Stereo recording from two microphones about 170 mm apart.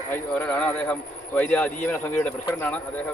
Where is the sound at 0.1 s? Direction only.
10° left (ahead or behind).